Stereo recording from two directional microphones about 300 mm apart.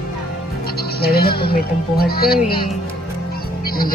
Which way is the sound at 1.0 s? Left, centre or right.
Left.